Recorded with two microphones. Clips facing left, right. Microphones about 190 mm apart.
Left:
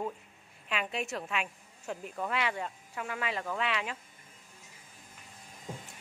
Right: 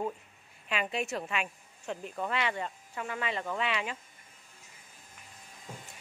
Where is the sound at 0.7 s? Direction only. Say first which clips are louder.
Right 2 dB; centre (ahead or behind).